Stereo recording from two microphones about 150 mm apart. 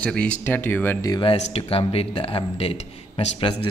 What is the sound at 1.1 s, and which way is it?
Speech, 35° left (ahead or behind).